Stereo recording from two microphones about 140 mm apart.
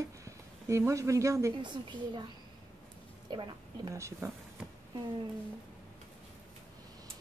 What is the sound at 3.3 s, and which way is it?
Speech, 35° right (ahead or behind).